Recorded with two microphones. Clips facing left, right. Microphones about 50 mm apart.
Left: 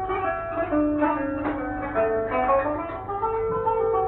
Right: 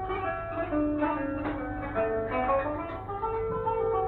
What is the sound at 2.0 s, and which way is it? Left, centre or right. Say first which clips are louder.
Zither: left 5 dB; centre.